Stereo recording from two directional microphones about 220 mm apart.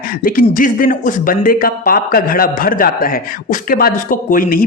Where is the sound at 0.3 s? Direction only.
40° left (ahead or behind).